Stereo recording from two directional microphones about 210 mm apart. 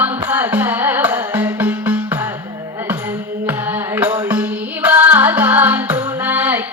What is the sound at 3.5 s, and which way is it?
Music, 10° right (ahead or behind).